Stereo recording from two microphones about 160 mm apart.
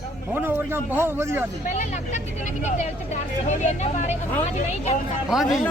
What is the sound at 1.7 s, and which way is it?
Speech, 50° left (ahead or behind).